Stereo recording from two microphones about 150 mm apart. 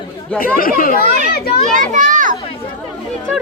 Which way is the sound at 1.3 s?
90° left.